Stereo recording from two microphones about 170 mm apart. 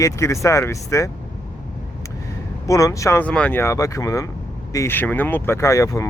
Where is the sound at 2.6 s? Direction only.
20° left (ahead or behind).